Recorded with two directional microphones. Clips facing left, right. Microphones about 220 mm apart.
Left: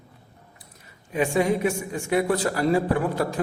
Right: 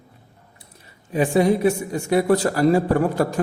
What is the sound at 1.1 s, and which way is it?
A man's voice, 35° right (ahead or behind).